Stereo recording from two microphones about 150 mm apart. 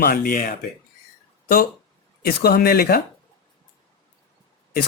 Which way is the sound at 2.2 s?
90° left.